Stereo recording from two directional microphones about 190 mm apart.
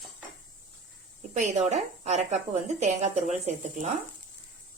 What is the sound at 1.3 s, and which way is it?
A woman's voice, 35° right (ahead or behind).